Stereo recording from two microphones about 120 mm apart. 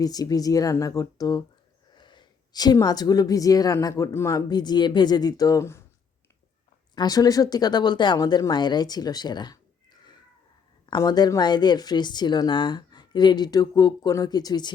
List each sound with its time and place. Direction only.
0.0 s a woman's voice: 30° left (ahead or behind)
2.0 s a sound: 40° left (ahead or behind)
2.8 s a woman's voice: 35° left (ahead or behind)
6.9 s a woman's voice: 35° left (ahead or behind)